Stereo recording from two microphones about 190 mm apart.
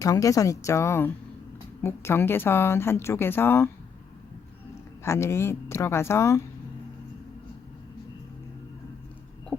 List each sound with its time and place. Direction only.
0.0 s a woman's voice: 20° left (ahead or behind)
5.0 s a woman's voice: 15° left (ahead or behind)
9.5 s heart murmur: 10° left (ahead or behind)